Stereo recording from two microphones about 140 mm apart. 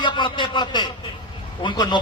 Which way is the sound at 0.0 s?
35° left (ahead or behind).